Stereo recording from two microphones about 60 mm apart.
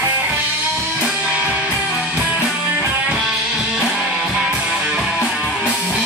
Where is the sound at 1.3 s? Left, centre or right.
Right.